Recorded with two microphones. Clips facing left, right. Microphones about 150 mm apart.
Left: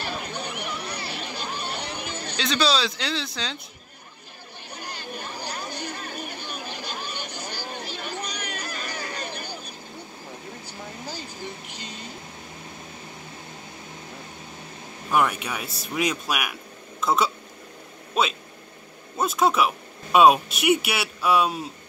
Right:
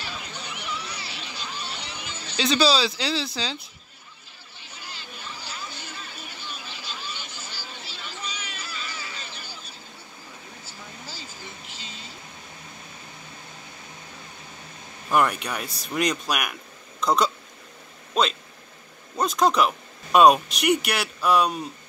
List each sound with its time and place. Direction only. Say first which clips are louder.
0.0 s a sound: left 6 dB; 50° left (ahead or behind)
2.3 s speech: right 3 dB; 5° right (ahead or behind)
4.7 s vehicle: left 6 dB; 50° left (ahead or behind)
5.9 s a sound: left 7 dB; 45° left (ahead or behind)
7.2 s vehicle: left 6 dB; 15° left (ahead or behind)
7.5 s chatter: left 7 dB; 50° left (ahead or behind)
9.5 s vehicle: left 6 dB; 15° left (ahead or behind)
15.0 s speech: right 1 dB; centre (ahead or behind)